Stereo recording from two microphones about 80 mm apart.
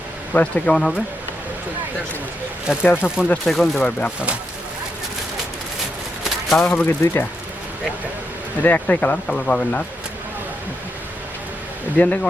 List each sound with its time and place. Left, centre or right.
0.3 s speech: centre
2.7 s speech: centre
3.0 s speech: left
3.4 s speech: centre
3.8 s speech: centre
6.2 s a sound: centre
6.8 s speech: left
8.6 s speech: centre
11.9 s speech: centre